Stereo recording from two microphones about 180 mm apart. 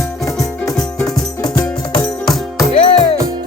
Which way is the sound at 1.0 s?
20° left (ahead or behind).